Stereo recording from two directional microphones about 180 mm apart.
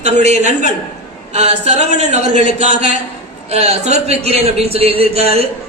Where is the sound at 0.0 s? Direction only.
40° right (ahead or behind).